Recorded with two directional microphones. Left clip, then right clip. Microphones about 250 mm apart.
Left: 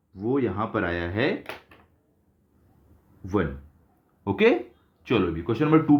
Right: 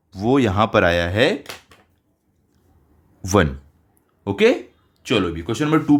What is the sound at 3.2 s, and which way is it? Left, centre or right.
Speech, right.